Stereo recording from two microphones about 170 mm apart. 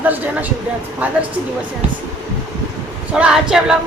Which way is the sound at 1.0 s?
10° right (ahead or behind).